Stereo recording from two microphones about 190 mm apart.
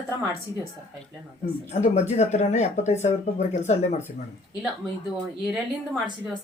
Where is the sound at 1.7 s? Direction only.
35° left (ahead or behind).